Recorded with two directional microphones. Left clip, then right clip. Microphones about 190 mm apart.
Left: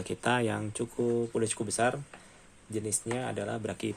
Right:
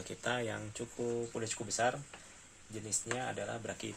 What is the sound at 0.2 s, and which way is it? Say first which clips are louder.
Speech: left 7 dB; 50° left (ahead or behind).